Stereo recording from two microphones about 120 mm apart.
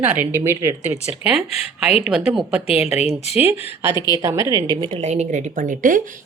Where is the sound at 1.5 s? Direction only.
65° left (ahead or behind).